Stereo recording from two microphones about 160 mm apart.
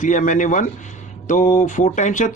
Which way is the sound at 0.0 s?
55° left (ahead or behind).